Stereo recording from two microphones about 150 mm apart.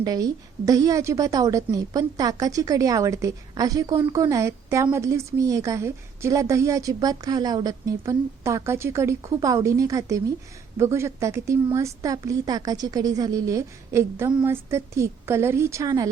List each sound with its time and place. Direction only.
0.0 s a woman's voice: 25° right (ahead or behind)